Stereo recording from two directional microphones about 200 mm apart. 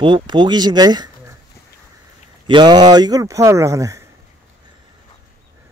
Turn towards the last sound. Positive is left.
turn(degrees=-15)  # may be behind; listen again after turning